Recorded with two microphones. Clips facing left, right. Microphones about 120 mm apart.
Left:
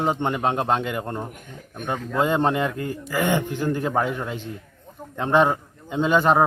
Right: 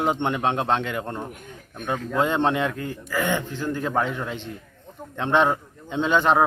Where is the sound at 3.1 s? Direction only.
15° left (ahead or behind).